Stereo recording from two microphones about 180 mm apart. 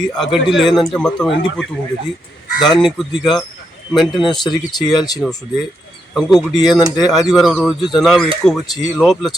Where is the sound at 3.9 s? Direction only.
Centre (ahead or behind).